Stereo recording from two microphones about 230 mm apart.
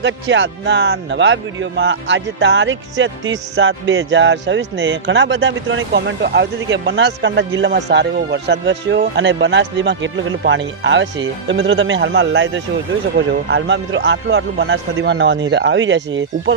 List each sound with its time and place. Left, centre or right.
0.0 s speech: right